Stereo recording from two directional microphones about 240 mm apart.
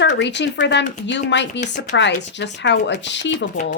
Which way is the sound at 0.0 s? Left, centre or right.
Left.